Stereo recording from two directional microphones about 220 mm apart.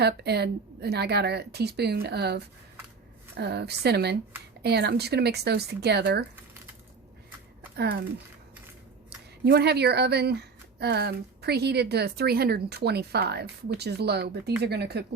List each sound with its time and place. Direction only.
0.0 s speech: 50° right (ahead or behind)
9.0 s speech: 50° right (ahead or behind)